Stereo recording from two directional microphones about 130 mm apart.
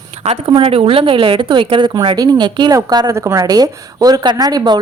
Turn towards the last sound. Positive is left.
turn(degrees=-30)  # may be behind; listen again after turning